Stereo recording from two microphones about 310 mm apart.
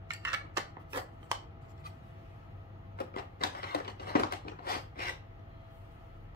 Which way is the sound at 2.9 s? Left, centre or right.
Left.